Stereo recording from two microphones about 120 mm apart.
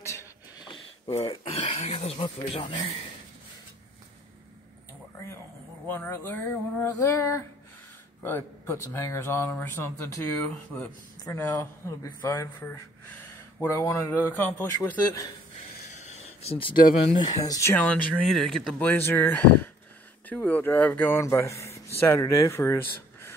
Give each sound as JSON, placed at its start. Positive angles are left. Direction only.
{"t": 0.0, "sound": "a sound", "side_deg": 25}
{"t": 1.7, "sound": "speech", "side_deg": 55}
{"t": 2.2, "sound": "speech", "side_deg": 45}
{"t": 5.9, "sound": "speech", "side_deg": 20}
{"t": 10.5, "sound": "speech", "side_deg": 5}
{"t": 11.3, "sound": "speech", "side_deg": 20}
{"t": 16.1, "sound": "a sound", "side_deg": 55}
{"t": 17.5, "sound": "speech", "side_deg": 25}
{"t": 17.8, "sound": "speech", "side_deg": 10}
{"t": 18.9, "sound": "speech", "side_deg": 15}